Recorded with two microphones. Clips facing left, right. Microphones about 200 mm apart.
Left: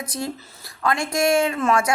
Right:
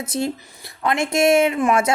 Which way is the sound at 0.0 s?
25° right (ahead or behind).